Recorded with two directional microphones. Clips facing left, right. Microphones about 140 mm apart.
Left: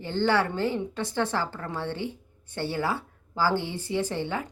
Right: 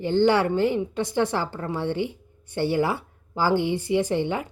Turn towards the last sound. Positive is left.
turn(degrees=-15)  # may be behind; listen again after turning